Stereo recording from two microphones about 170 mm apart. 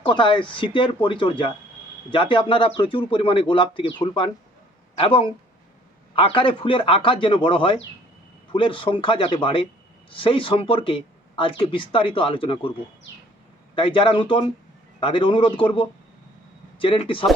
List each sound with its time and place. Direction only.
0.0 s speech: 30° left (ahead or behind)
13.7 s speech: 30° left (ahead or behind)